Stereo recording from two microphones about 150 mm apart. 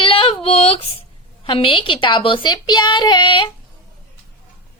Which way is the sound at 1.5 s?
35° left (ahead or behind).